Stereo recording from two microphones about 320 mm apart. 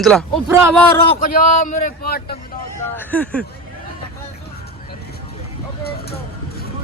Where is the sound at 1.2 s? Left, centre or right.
Left.